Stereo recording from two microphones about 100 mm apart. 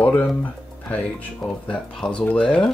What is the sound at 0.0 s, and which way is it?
Speech, 20° left (ahead or behind).